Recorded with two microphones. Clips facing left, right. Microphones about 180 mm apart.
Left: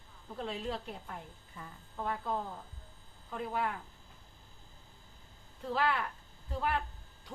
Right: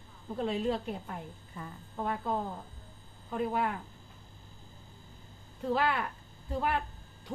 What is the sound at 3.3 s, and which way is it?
Speech, 20° right (ahead or behind).